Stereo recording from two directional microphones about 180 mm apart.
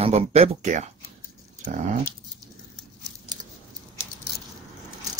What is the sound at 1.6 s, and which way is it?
Dog, 45° right (ahead or behind).